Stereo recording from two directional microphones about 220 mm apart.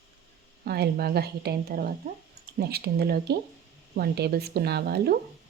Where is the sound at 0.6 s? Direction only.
45° right (ahead or behind).